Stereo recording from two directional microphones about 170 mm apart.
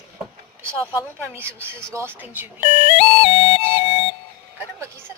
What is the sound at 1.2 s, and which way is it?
Speech, 15° right (ahead or behind).